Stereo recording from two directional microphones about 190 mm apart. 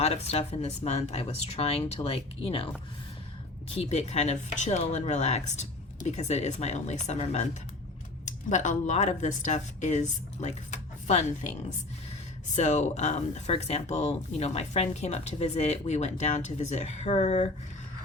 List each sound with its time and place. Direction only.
0.0 s speech: 35° left (ahead or behind)
3.8 s speech: 35° left (ahead or behind)
12.5 s speech: 40° left (ahead or behind)